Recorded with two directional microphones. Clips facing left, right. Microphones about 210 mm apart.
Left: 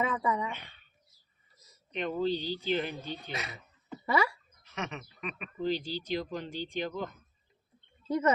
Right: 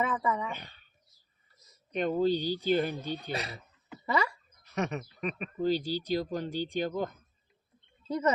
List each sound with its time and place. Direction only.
0.0 s a woman's voice: 10° left (ahead or behind)
0.5 s speech: 40° right (ahead or behind)
1.9 s speech: 40° right (ahead or behind)
4.6 s speech: 40° right (ahead or behind)
8.0 s speech: 10° left (ahead or behind)